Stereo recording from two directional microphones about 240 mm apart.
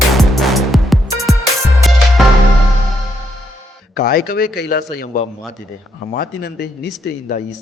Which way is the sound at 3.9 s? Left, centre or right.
Left.